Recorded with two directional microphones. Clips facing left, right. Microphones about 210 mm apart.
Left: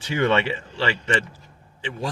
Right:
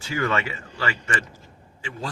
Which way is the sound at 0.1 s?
25° left (ahead or behind).